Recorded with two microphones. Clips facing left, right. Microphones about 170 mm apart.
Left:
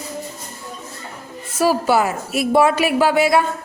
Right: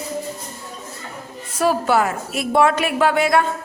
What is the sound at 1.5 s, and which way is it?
A woman's voice, 5° left (ahead or behind).